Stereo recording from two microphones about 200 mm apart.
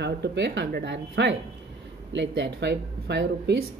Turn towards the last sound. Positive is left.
turn(degrees=-60)  # may be behind; listen again after turning